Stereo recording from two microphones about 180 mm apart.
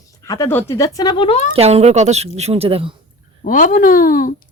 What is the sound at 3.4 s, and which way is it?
Speech, 50° left (ahead or behind).